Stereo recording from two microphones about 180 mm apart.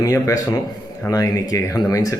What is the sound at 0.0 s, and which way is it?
A man's voice, 20° left (ahead or behind).